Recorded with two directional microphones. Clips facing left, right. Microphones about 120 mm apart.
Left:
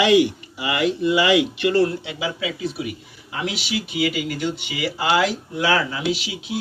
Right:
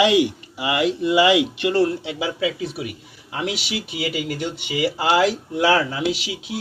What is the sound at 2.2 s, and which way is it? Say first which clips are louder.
Speech: right 2 dB; 40° right (ahead or behind).